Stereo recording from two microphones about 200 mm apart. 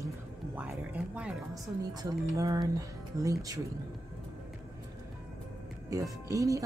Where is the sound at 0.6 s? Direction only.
5° right (ahead or behind).